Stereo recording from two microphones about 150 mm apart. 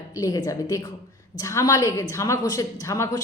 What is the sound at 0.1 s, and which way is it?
A woman's voice, 25° left (ahead or behind).